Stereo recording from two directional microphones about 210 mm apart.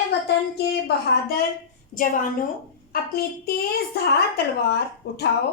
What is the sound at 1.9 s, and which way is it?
Speech, 35° left (ahead or behind).